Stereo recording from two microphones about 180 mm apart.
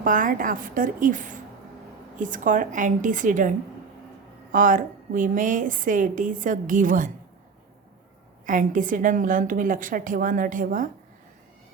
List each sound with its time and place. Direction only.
0.0 s a woman's voice: 50° right (ahead or behind)
4.5 s a woman's voice: 45° right (ahead or behind)
8.4 s a woman's voice: 45° right (ahead or behind)